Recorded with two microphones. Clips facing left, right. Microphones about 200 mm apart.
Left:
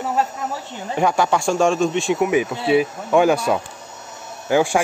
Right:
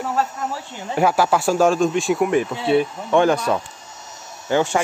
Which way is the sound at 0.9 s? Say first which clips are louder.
Right 1 dB; 5° right (ahead or behind).